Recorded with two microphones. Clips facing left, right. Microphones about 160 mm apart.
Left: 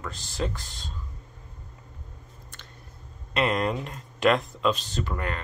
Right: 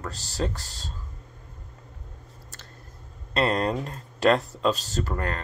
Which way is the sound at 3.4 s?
35° right (ahead or behind).